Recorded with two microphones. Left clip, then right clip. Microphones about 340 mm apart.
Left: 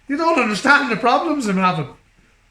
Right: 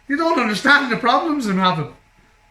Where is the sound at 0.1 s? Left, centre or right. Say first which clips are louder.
Left 1 dB; centre.